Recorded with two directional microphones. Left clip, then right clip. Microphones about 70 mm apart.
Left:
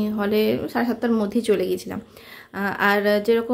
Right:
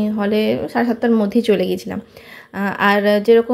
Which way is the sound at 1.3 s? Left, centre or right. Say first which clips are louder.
Right 5 dB; right.